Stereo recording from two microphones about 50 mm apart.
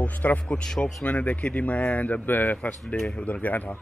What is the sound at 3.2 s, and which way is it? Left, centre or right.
Speech, left.